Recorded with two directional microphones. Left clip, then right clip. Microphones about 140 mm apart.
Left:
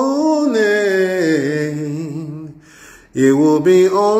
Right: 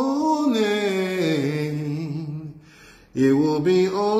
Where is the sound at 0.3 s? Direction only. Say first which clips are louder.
Left 7 dB; 35° right (ahead or behind); by 2.2 s 15° right (ahead or behind).